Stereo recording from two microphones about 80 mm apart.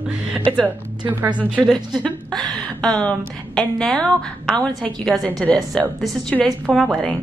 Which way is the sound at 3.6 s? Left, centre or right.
Centre.